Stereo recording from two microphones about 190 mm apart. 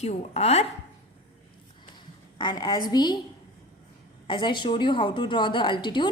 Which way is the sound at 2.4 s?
20° left (ahead or behind).